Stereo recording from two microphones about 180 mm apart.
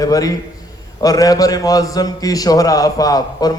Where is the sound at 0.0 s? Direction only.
20° left (ahead or behind).